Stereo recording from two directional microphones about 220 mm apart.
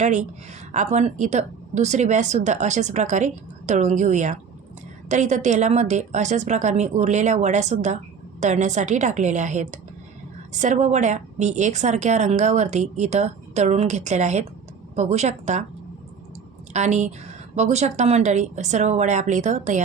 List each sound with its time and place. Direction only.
0.0 s a woman's voice: 35° right (ahead or behind)
16.7 s a woman's voice: 30° right (ahead or behind)